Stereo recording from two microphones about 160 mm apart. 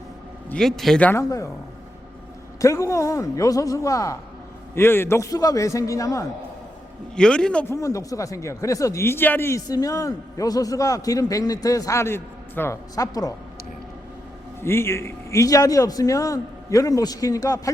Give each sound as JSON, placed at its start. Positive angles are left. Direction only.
{"t": 0.5, "sound": "a man's voice", "side_deg": 0}
{"t": 2.6, "sound": "speech", "side_deg": 20}
{"t": 7.2, "sound": "a man's voice", "side_deg": 5}
{"t": 7.7, "sound": "speech", "side_deg": 20}
{"t": 14.6, "sound": "speech", "side_deg": 15}